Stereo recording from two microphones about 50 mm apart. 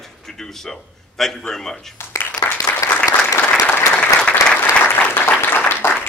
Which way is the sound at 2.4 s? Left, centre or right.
Left.